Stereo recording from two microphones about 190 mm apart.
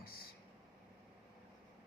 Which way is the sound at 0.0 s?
50° left (ahead or behind).